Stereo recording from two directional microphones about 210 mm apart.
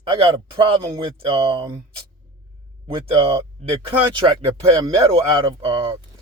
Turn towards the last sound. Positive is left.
turn(degrees=-25)  # may be behind; listen again after turning